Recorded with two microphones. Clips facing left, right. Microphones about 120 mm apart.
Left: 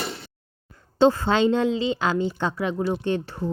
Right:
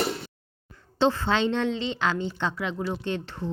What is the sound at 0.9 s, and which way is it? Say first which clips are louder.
A woman's voice: left 5 dB; 40° left (ahead or behind).